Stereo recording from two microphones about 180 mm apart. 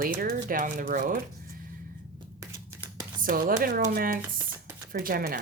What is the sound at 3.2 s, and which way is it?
Speech, 50° right (ahead or behind).